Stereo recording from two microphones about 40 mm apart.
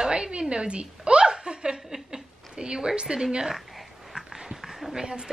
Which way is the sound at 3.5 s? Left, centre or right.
Centre.